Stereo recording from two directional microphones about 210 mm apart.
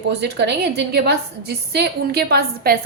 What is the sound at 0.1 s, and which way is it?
A woman's voice, 55° right (ahead or behind).